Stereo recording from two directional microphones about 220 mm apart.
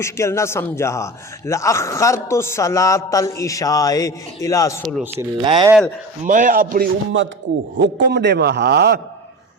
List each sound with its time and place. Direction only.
0.0 s a man's voice: 10° left (ahead or behind)
4.8 s speech: centre (ahead or behind)
5.1 s speech: 20° right (ahead or behind)
6.2 s a man's voice: 35° right (ahead or behind)
7.8 s a man's voice: 50° right (ahead or behind)